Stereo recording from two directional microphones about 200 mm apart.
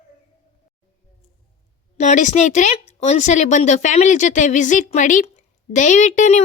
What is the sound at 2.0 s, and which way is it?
Speech, 35° left (ahead or behind).